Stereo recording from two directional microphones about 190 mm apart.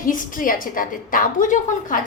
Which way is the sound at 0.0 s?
45° left (ahead or behind).